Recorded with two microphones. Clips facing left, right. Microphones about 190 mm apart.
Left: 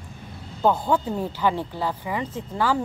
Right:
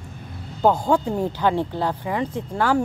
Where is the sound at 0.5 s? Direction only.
15° right (ahead or behind).